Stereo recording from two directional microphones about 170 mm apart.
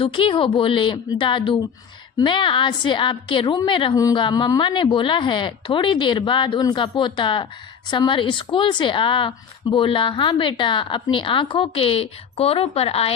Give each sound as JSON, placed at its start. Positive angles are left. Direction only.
{"t": 0.0, "sound": "a woman's voice", "side_deg": 30}